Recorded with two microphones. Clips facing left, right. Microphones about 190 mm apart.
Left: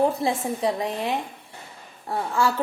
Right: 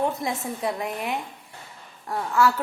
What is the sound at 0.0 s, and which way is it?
A woman's voice, 30° left (ahead or behind).